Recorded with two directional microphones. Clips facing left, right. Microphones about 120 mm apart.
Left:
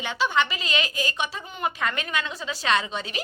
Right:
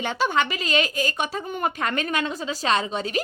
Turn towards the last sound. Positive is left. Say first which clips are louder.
# right 2 dB
turn(degrees=-40)  # may be behind; listen again after turning